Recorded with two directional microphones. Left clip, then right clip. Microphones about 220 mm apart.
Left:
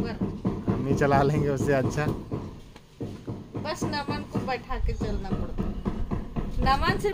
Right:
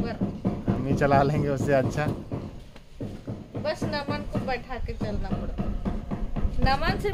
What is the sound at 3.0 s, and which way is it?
Goat, 45° right (ahead or behind).